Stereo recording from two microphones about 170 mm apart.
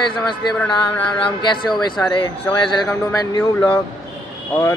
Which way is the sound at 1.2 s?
25° left (ahead or behind).